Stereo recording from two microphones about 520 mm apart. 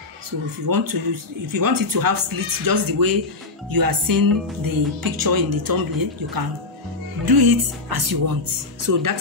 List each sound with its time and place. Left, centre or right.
0.7 s speech: right